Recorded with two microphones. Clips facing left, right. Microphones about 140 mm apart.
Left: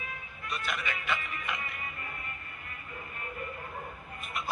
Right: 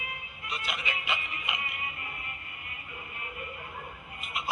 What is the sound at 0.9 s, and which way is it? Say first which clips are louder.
Speech: left 1 dB; 20° right (ahead or behind).